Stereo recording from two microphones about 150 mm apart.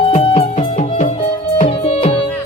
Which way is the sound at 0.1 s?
45° left (ahead or behind).